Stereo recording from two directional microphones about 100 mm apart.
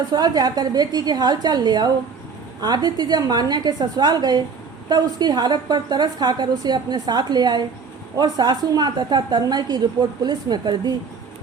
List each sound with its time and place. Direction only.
0.1 s a woman's voice: 45° right (ahead or behind)